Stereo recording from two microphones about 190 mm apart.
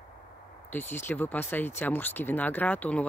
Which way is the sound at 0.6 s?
10° left (ahead or behind).